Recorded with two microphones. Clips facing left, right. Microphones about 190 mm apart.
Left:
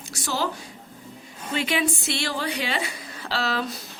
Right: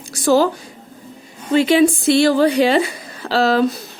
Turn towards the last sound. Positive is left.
turn(degrees=-40)  # may be behind; listen again after turning